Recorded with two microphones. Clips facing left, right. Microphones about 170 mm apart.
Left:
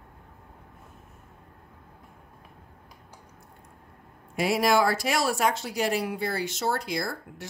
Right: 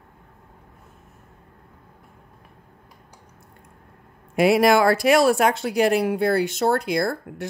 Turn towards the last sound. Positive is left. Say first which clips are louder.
# right 9 dB
turn(degrees=-55)  # may be behind; listen again after turning